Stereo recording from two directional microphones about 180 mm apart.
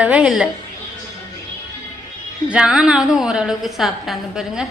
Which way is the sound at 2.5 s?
5° right (ahead or behind).